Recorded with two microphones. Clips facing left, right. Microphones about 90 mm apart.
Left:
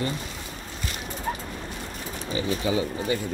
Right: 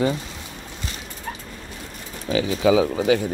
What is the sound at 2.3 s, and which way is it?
Speech, 90° right.